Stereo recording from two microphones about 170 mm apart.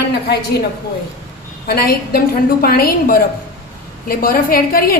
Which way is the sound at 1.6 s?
65° left (ahead or behind).